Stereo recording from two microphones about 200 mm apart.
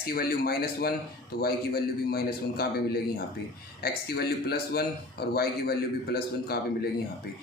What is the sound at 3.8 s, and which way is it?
Speech, 50° left (ahead or behind).